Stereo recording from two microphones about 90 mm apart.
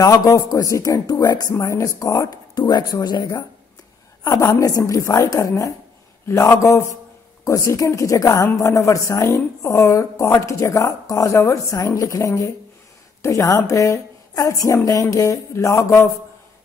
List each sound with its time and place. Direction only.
0.0 s a woman's voice: 40° left (ahead or behind)
1.6 s speech: 35° left (ahead or behind)
4.2 s a woman's voice: 40° left (ahead or behind)